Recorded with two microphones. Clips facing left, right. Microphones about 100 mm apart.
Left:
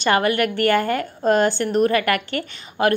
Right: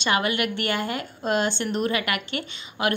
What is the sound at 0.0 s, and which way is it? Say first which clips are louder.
A woman's voice: left 5 dB; 45° left (ahead or behind).